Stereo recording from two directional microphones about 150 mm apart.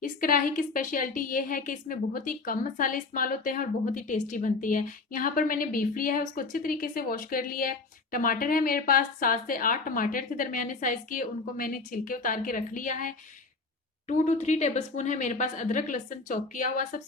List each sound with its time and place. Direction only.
0.0 s a woman's voice: 70° left (ahead or behind)